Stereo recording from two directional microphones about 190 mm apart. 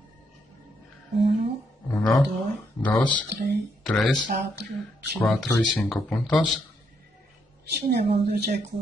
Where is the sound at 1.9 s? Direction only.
10° left (ahead or behind).